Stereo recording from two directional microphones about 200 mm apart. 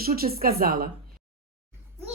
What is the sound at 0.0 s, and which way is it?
Speech, 50° right (ahead or behind).